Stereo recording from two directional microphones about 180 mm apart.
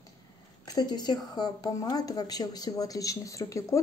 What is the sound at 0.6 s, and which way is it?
A woman's voice, 20° left (ahead or behind).